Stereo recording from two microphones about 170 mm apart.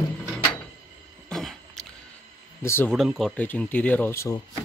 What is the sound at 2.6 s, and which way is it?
Speech, 15° left (ahead or behind).